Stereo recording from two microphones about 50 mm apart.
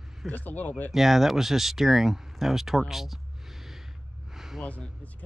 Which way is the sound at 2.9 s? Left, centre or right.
Centre.